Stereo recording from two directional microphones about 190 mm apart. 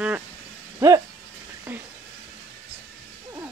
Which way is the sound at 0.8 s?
15° right (ahead or behind).